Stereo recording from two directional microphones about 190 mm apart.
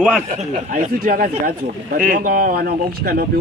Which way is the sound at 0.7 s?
45° right (ahead or behind).